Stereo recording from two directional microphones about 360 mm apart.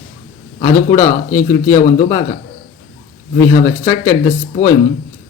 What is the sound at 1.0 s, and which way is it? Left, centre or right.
Speech, centre.